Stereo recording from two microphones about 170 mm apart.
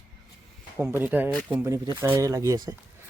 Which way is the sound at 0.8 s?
10° right (ahead or behind).